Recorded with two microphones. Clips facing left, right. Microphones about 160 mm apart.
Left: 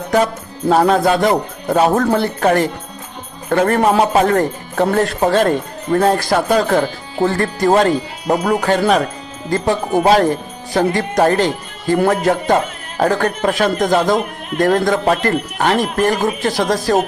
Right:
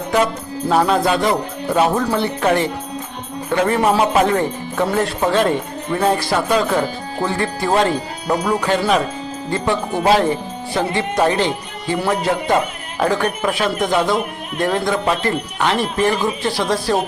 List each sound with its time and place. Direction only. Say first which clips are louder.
0.7 s speech: left 3 dB; 40° left (ahead or behind)
3.5 s speech: left 3 dB; 55° left (ahead or behind)
4.0 s speech: left 2 dB; 40° left (ahead or behind)
8.4 s speech: left 3 dB; 55° left (ahead or behind)